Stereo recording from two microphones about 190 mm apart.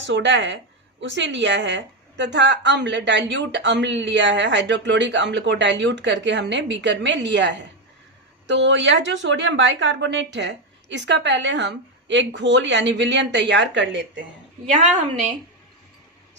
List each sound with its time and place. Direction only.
0.0 s a woman's voice: 75° right (ahead or behind)